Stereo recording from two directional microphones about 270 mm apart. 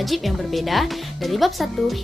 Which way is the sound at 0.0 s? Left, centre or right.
Centre.